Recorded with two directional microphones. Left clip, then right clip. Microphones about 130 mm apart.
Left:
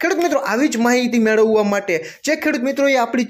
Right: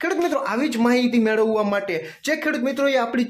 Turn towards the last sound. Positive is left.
turn(degrees=25)  # may be behind; listen again after turning